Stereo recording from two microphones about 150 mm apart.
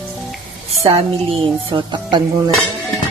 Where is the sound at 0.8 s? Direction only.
40° right (ahead or behind).